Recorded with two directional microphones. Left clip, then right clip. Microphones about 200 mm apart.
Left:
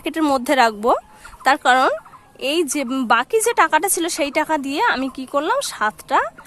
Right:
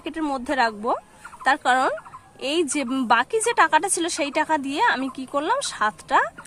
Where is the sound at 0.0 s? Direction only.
30° left (ahead or behind).